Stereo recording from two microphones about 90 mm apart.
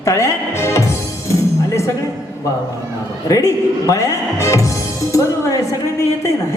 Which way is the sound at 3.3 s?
40° left (ahead or behind).